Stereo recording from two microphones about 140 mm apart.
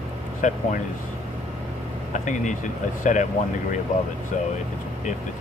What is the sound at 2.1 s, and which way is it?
Speech, 60° left (ahead or behind).